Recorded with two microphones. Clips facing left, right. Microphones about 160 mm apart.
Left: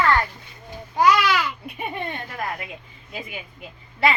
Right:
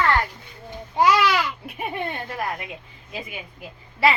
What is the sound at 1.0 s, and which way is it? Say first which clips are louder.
Babbling: left 1 dB; 25° right (ahead or behind).